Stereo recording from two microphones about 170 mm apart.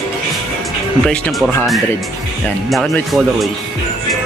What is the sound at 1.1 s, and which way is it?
Speech, centre (ahead or behind).